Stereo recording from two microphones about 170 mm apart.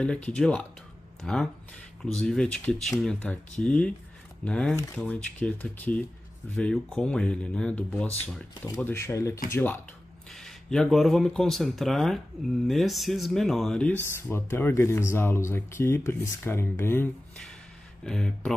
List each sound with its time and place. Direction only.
0.0 s speech: 5° left (ahead or behind)
8.6 s speech: 20° left (ahead or behind)